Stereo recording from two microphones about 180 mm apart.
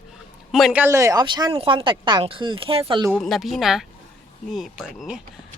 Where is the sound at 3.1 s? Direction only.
Centre (ahead or behind).